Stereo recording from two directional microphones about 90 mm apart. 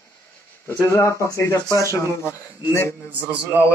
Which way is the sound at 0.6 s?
25° left (ahead or behind).